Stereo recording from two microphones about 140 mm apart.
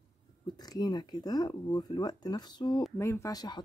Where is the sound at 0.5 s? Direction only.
30° left (ahead or behind).